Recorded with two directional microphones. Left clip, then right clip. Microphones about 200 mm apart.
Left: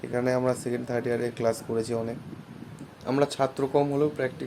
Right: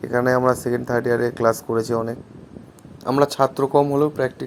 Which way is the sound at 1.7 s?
20° right (ahead or behind).